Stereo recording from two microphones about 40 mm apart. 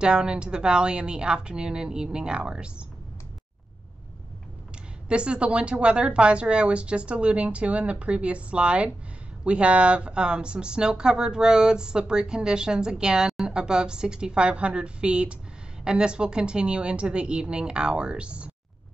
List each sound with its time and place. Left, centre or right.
0.0 s a woman's voice: right
5.0 s a woman's voice: right